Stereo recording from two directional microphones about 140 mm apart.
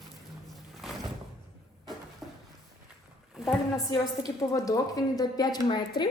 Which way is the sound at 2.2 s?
Centre (ahead or behind).